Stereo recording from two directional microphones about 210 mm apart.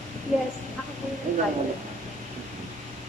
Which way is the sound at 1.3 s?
40° right (ahead or behind).